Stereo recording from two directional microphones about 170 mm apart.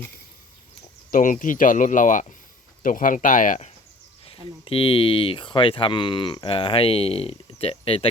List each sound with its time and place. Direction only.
1.1 s speech: 50° left (ahead or behind)
4.6 s speech: 30° left (ahead or behind)